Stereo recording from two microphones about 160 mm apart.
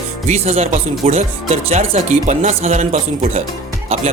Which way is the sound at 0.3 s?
40° right (ahead or behind).